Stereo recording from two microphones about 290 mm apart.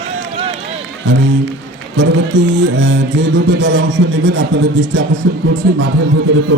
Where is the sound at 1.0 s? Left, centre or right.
Right.